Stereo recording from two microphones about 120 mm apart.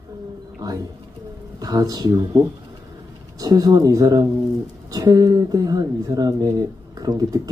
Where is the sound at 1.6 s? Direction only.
30° right (ahead or behind).